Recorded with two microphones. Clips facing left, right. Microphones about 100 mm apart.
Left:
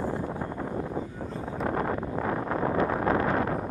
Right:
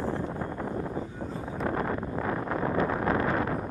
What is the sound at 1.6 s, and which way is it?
Vehicle, 30° left (ahead or behind).